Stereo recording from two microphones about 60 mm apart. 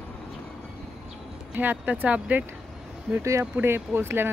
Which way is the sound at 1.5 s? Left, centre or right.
Right.